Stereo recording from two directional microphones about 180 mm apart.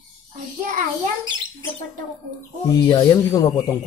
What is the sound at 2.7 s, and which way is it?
Speech, 20° left (ahead or behind).